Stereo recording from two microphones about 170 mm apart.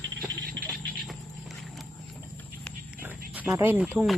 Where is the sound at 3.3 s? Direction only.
10° right (ahead or behind).